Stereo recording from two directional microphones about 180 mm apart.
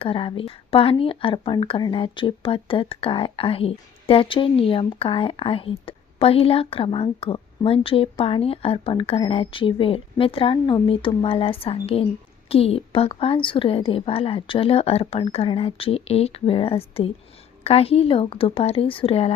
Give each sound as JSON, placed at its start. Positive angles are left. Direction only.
{"t": 0.0, "sound": "speech", "side_deg": 30}